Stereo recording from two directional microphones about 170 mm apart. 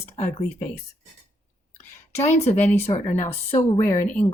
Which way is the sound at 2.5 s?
15° left (ahead or behind).